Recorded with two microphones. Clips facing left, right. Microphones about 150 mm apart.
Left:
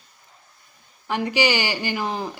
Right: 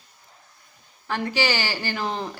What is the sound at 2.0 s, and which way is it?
Speech, 5° left (ahead or behind).